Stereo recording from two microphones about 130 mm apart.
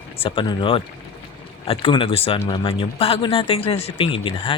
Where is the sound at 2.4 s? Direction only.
40° left (ahead or behind).